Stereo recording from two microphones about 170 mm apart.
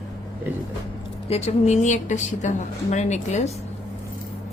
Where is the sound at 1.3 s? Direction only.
45° left (ahead or behind).